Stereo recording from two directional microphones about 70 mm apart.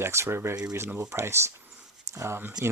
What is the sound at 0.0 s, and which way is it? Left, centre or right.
Speech, right.